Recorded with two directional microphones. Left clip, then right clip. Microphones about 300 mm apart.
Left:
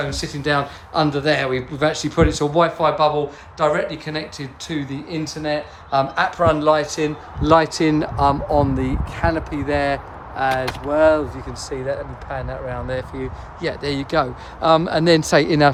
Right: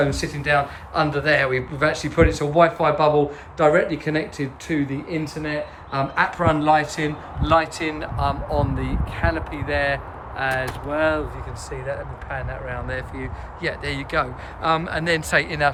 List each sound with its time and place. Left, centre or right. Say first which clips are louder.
0.0 s a man's voice: right 2 dB; centre